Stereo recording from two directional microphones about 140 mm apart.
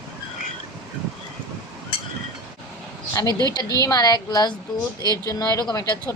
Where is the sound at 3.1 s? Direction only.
25° left (ahead or behind).